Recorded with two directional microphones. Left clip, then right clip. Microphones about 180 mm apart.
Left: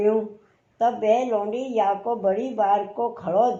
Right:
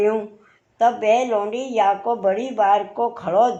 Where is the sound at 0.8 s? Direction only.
15° right (ahead or behind).